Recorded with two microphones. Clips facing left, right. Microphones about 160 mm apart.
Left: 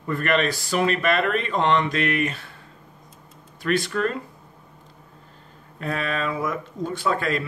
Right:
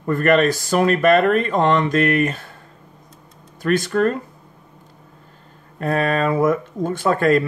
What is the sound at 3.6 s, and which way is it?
Speech, 45° right (ahead or behind).